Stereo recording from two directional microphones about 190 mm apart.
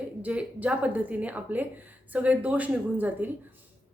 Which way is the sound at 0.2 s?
5° right (ahead or behind).